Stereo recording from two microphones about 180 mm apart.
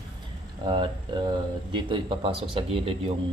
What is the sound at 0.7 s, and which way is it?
Speech, 25° right (ahead or behind).